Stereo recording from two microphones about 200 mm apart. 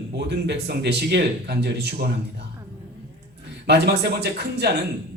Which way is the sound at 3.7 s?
55° right (ahead or behind).